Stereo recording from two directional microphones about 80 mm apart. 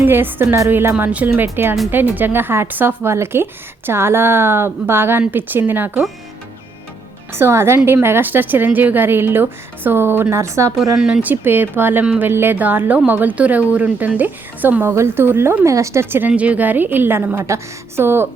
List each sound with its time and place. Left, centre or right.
0.0 s a woman's voice: right
7.3 s a woman's voice: right
10.9 s speech: centre
11.2 s a woman's voice: right
16.3 s a woman's voice: centre